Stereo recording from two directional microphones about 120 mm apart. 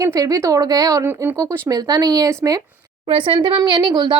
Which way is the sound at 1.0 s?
20° right (ahead or behind).